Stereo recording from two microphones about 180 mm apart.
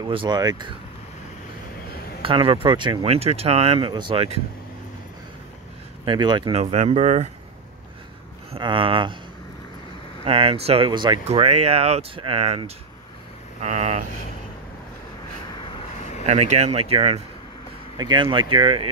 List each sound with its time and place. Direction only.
0.0 s speech: 25° right (ahead or behind)
2.2 s speech: 30° right (ahead or behind)
6.0 s speech: 25° right (ahead or behind)
8.5 s speech: 30° right (ahead or behind)
10.2 s speech: 30° right (ahead or behind)
16.3 s speech: 40° right (ahead or behind)